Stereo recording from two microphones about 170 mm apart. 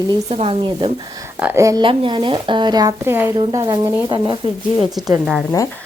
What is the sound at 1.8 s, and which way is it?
Speech, 30° right (ahead or behind).